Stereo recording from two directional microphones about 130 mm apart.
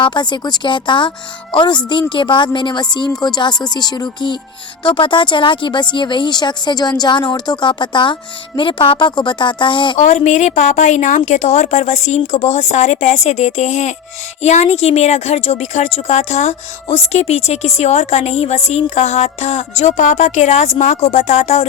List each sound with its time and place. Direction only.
0.0 s speech: 35° left (ahead or behind)
10.0 s speech: 65° left (ahead or behind)